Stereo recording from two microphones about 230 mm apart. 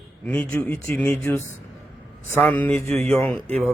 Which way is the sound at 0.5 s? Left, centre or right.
Centre.